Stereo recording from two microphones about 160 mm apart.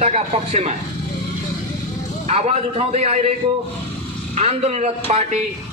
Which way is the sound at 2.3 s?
40° right (ahead or behind).